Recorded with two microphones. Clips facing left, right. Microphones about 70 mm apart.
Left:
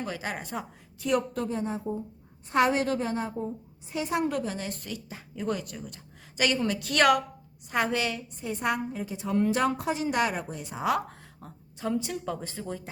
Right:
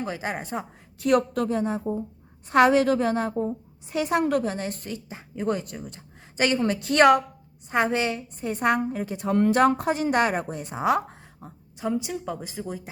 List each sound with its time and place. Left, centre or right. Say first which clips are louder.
0.0 s a woman's voice: right 4 dB; right
0.9 s a woman's voice: right 6 dB; right
4.5 s a woman's voice: right 4 dB; right
8.4 s a woman's voice: right 6 dB; right
10.8 s a woman's voice: right 4 dB; right
11.3 s speech: right 3 dB; centre